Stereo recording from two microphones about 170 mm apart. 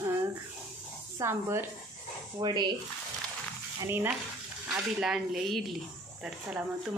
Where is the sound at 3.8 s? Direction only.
15° right (ahead or behind).